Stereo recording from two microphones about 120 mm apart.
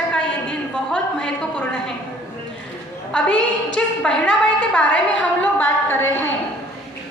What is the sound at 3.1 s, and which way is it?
A woman's voice, 10° left (ahead or behind).